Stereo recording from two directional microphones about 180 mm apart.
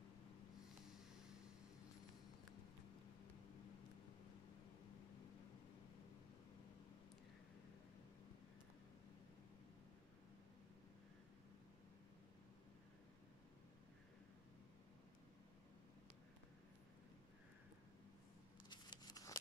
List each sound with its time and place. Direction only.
0.9 s vehicle: 5° right (ahead or behind)
18.7 s scissors: 25° left (ahead or behind)